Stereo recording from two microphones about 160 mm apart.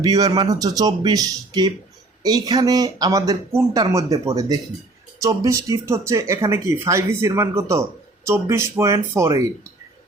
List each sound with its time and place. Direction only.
0.0 s speech: 25° right (ahead or behind)